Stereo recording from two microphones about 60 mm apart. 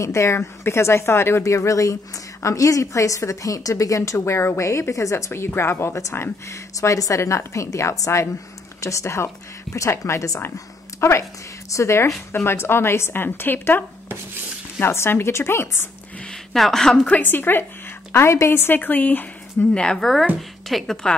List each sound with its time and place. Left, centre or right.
0.0 s speech: left
1.4 s a woman's voice: left
5.3 s speech: left
6.5 s a woman's voice: left
16.3 s a woman's voice: centre
17.1 s speech: left
18.3 s a woman's voice: left
18.6 s speech: left
19.7 s a woman's voice: centre
20.0 s a woman's voice: centre